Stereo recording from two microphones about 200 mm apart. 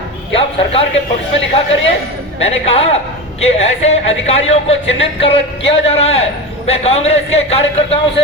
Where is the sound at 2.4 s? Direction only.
30° left (ahead or behind).